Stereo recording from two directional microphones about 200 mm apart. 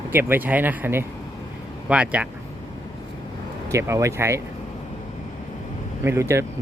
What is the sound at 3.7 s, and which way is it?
Speech, 15° right (ahead or behind).